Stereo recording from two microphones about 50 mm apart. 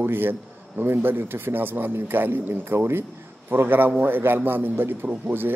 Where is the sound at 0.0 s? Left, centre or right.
Right.